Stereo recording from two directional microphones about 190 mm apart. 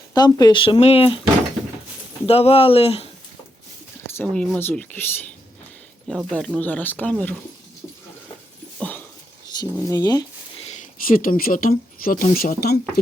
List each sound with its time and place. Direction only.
0.1 s speech: 20° left (ahead or behind)
1.6 s a sound: centre (ahead or behind)
2.2 s speech: 30° left (ahead or behind)
4.2 s speech: 5° left (ahead or behind)
8.8 s dog: 10° left (ahead or behind)
9.7 s speech: 15° left (ahead or behind)
11.0 s speech: 45° left (ahead or behind)